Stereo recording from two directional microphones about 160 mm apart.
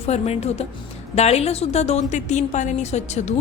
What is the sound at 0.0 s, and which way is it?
A woman's voice, 40° left (ahead or behind).